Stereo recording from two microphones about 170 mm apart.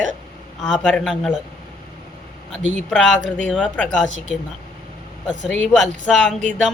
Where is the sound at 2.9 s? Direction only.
5° left (ahead or behind).